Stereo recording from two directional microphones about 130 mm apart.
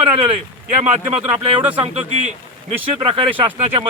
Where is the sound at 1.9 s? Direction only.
60° right (ahead or behind).